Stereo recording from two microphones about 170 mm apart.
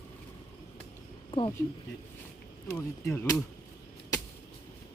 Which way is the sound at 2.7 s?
10° left (ahead or behind).